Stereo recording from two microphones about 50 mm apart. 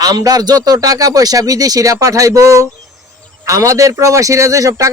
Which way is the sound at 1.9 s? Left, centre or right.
Right.